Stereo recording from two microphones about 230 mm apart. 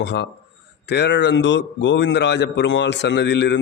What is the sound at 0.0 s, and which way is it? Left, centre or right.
A man's voice, left.